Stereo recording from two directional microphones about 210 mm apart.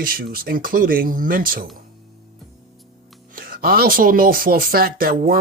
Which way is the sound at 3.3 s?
45° right (ahead or behind).